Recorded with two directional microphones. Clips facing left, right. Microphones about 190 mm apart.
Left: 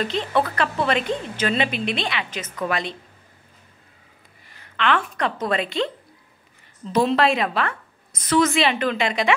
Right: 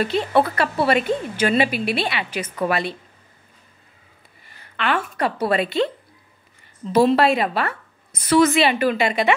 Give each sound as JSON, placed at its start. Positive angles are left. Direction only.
{"t": 0.0, "sound": "a woman's voice", "side_deg": -10}
{"t": 4.7, "sound": "a woman's voice", "side_deg": -5}
{"t": 6.9, "sound": "a woman's voice", "side_deg": -5}